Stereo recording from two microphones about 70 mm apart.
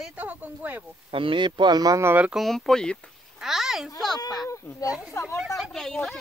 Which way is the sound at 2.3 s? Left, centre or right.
Centre.